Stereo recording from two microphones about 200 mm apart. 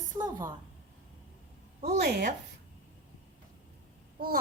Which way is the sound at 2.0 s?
55° right (ahead or behind).